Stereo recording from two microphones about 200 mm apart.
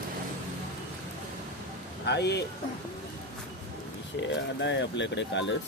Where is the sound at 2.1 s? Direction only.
55° left (ahead or behind).